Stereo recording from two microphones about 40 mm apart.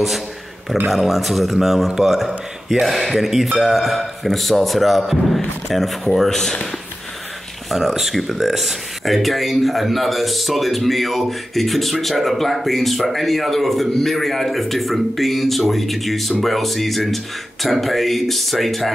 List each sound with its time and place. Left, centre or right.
0.8 s speech: centre
7.7 s speech: centre